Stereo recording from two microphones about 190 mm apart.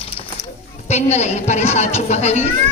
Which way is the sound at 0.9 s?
35° left (ahead or behind).